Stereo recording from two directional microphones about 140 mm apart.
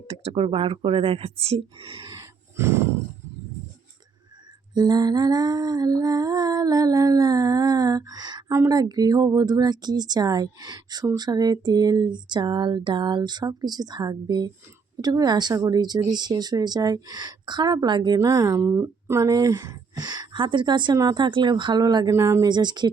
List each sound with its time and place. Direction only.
0.3 s speech: 45° right (ahead or behind)
2.1 s a sound: 20° right (ahead or behind)
4.7 s speech: 30° right (ahead or behind)